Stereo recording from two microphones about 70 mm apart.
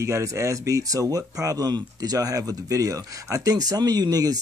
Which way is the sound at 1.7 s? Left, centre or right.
Right.